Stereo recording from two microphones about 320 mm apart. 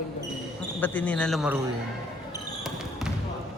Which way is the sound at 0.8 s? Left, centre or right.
Centre.